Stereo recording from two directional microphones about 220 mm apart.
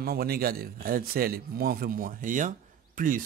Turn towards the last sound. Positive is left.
turn(degrees=-40)  # may be behind; listen again after turning